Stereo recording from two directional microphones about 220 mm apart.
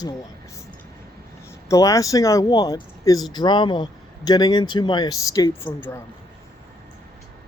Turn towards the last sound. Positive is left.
turn(degrees=10)  # may be behind; listen again after turning